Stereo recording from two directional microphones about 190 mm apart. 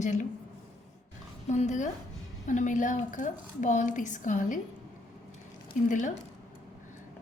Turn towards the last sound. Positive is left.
turn(degrees=40)  # may be behind; listen again after turning